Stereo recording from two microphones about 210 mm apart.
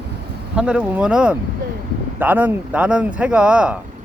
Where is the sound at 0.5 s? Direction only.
5° right (ahead or behind).